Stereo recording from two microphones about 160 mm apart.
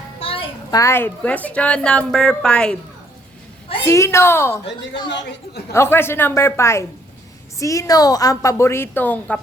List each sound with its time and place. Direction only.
0.2 s a sound: 35° left (ahead or behind)
0.8 s a woman's voice: 15° left (ahead or behind)
3.8 s a woman's voice: 15° left (ahead or behind)
5.0 s a woman's voice: 90° left
5.7 s a woman's voice: 15° left (ahead or behind)